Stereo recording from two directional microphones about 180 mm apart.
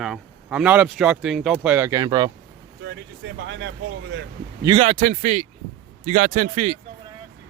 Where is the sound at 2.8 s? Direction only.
80° right.